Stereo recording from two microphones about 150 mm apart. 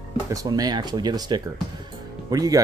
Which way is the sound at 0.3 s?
25° right (ahead or behind).